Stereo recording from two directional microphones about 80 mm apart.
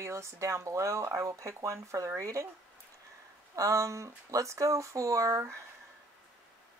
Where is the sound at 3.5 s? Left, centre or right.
Right.